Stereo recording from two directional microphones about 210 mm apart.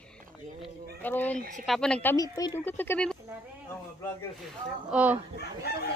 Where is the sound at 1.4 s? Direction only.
40° right (ahead or behind).